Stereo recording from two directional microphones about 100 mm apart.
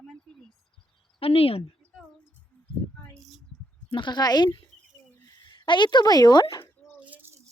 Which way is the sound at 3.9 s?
55° left (ahead or behind).